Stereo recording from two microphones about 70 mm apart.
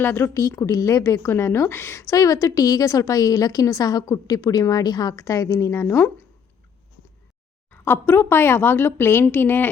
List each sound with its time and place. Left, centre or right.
0.0 s speech: left
0.6 s a woman's voice: left
5.2 s a woman's voice: left
7.7 s a woman's voice: left